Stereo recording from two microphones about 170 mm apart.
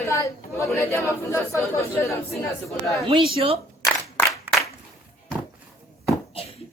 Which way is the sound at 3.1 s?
30° right (ahead or behind).